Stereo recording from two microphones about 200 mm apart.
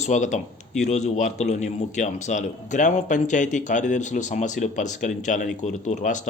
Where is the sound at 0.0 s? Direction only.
35° left (ahead or behind).